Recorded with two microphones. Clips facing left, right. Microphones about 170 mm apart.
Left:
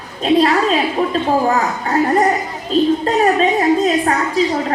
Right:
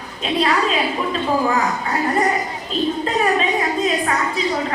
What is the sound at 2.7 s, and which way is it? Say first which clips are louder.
Child singing: left 7 dB; 40° left (ahead or behind).